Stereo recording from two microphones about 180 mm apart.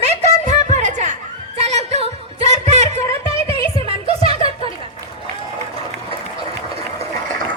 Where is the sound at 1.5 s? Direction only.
35° right (ahead or behind).